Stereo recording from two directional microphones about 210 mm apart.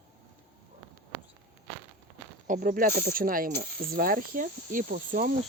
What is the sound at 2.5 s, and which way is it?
Speech, 40° right (ahead or behind).